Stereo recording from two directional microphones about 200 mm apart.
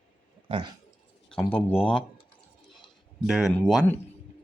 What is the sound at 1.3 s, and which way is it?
Speech, 5° left (ahead or behind).